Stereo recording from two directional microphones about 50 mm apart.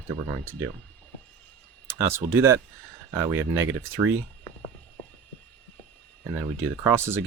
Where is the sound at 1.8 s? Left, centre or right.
Right.